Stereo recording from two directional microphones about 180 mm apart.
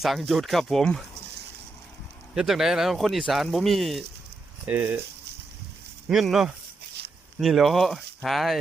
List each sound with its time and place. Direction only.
0.0 s speech: centre (ahead or behind)
2.3 s speech: centre (ahead or behind)
4.6 s speech: 10° right (ahead or behind)
6.1 s speech: centre (ahead or behind)
7.0 s a sound: 65° right (ahead or behind)
7.3 s speech: centre (ahead or behind)